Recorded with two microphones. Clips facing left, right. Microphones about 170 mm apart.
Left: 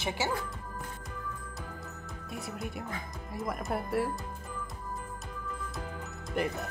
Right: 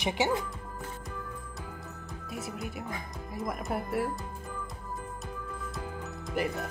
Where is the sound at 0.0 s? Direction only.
20° right (ahead or behind).